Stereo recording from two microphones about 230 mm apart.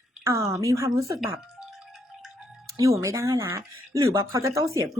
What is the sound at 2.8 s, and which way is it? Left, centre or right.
Speech, centre.